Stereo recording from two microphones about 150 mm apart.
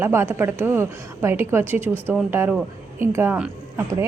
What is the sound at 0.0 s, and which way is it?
A woman's voice, 15° right (ahead or behind).